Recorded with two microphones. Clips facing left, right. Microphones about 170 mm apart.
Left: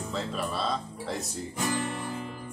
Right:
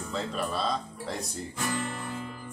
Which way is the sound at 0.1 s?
Centre (ahead or behind).